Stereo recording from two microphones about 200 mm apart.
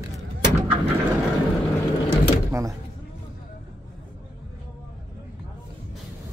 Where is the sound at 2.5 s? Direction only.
15° right (ahead or behind).